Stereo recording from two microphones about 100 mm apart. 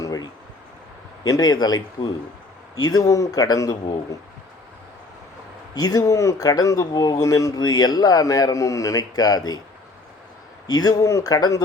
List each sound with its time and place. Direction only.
0.0 s a sound: 40° left (ahead or behind)
1.2 s speech: 40° left (ahead or behind)
5.7 s speech: 40° left (ahead or behind)
10.7 s speech: 40° left (ahead or behind)